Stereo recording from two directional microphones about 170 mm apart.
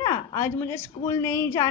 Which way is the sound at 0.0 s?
20° left (ahead or behind).